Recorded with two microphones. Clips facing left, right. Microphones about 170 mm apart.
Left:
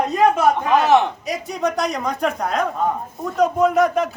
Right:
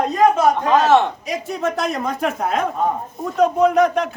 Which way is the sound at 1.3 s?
Centre (ahead or behind).